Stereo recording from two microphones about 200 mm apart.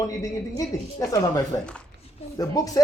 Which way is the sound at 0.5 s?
15° left (ahead or behind).